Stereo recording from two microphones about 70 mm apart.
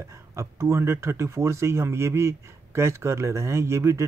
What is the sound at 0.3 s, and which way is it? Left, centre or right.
Speech, right.